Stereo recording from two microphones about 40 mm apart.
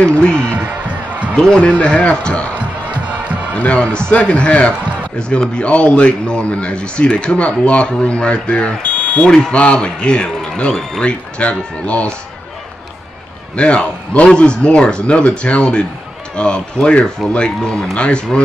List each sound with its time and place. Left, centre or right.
0.0 s speech: left
1.3 s a man's voice: centre
1.8 s speech: left
3.5 s a man's voice: left
8.9 s fire alarm: left
9.3 s speech: left
10.7 s speech: centre
11.0 s speech: left
13.6 s speech: left